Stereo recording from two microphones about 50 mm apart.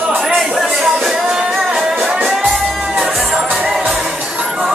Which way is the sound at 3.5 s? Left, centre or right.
Centre.